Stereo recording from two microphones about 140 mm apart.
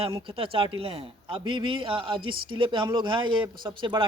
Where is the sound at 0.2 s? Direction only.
40° right (ahead or behind).